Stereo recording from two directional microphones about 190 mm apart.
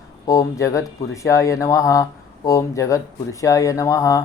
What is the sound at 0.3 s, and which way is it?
Speech, 15° left (ahead or behind).